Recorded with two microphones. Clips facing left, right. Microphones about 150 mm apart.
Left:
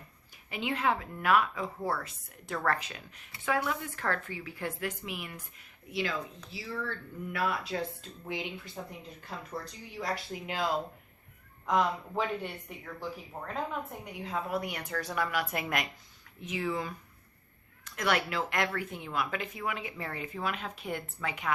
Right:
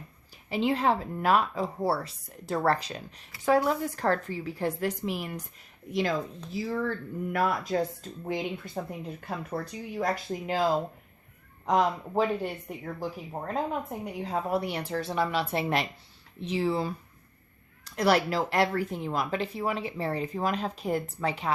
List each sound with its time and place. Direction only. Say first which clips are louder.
0.5 s speech: right 5 dB; 35° right (ahead or behind)